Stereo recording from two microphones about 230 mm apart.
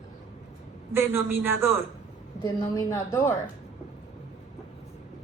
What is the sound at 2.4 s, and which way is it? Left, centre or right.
Speech, centre.